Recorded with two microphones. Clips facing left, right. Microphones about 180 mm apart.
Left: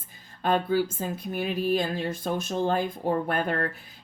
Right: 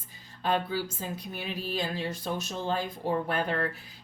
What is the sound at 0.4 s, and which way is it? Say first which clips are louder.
Speech: left 5 dB; 50° left (ahead or behind).